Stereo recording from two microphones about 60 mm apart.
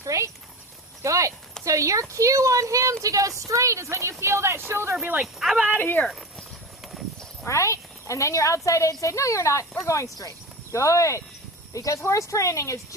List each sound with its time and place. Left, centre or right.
0.0 s horse: right
1.0 s speech: right
5.2 s speech: centre
5.8 s speech: left
7.4 s speech: left